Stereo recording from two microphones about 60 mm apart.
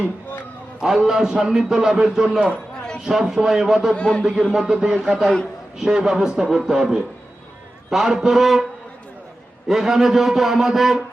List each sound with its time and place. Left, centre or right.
0.8 s a man's voice: centre
3.9 s speech: centre
4.2 s a man's voice: centre
9.6 s a man's voice: centre